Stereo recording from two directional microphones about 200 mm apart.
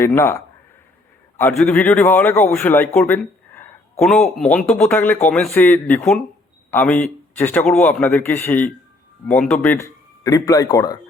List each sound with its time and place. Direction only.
0.0 s a man's voice: 10° left (ahead or behind)
1.4 s a man's voice: 5° left (ahead or behind)